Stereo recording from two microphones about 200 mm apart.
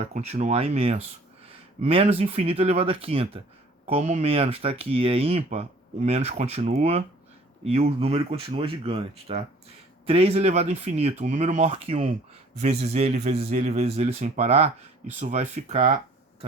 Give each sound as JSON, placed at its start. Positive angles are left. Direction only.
{"t": 0.0, "sound": "speech", "side_deg": -35}